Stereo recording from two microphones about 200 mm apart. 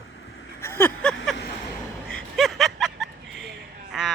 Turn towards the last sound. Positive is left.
turn(degrees=-5)  # may be behind; listen again after turning